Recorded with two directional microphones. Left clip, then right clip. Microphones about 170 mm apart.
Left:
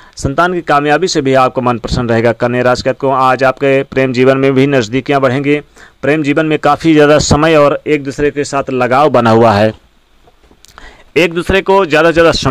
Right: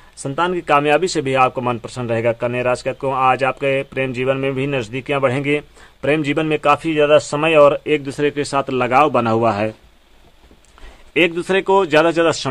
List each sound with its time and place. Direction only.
0.5 s speech: 25° left (ahead or behind)
8.9 s speech: 40° left (ahead or behind)
11.1 s speech: 25° left (ahead or behind)